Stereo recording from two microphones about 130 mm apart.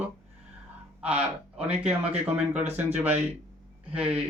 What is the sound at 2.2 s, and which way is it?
Speech, 15° right (ahead or behind).